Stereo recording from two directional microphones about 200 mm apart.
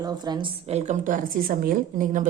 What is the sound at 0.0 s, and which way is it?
A woman's voice, 20° right (ahead or behind).